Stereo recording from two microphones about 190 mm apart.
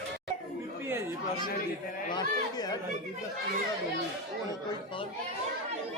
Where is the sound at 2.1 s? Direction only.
20° left (ahead or behind).